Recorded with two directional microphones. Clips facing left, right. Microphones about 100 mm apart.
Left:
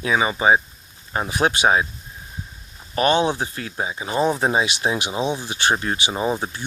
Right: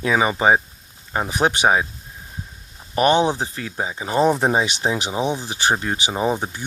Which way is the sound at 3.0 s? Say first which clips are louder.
Right 2 dB; 25° right (ahead or behind).